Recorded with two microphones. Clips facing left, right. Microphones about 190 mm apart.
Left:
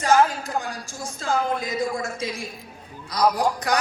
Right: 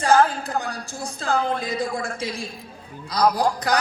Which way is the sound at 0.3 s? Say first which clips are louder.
Right 1 dB; 35° right (ahead or behind).